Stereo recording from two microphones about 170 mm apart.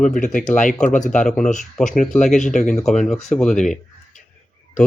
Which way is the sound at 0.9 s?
45° left (ahead or behind).